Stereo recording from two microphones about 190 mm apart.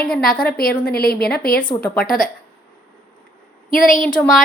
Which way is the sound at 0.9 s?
55° left (ahead or behind).